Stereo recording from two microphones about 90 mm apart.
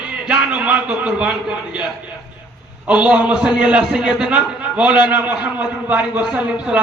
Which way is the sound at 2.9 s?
15° right (ahead or behind).